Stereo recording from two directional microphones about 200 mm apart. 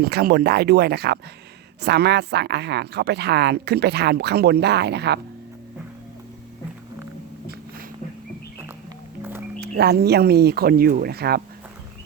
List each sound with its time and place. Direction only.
0.0 s speech: 50° right (ahead or behind)
9.6 s speech: 55° right (ahead or behind)